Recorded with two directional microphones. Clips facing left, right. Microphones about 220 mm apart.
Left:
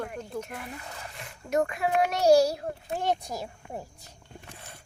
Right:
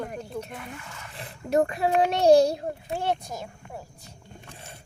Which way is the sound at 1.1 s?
35° right (ahead or behind).